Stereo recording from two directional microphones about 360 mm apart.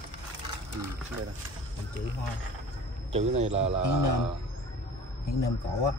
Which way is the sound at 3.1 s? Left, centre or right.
Centre.